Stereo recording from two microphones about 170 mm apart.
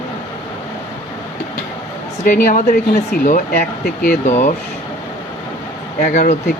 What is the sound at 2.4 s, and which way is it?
Speech, 55° left (ahead or behind).